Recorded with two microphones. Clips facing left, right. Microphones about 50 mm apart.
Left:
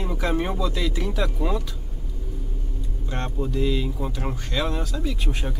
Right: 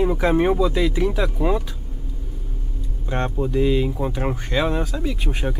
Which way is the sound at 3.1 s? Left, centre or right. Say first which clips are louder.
Right 6 dB; right.